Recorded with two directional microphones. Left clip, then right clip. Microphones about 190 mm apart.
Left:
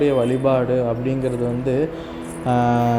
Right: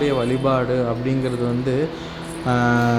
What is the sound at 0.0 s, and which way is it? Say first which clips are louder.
A man's voice: left 2 dB; 10° left (ahead or behind).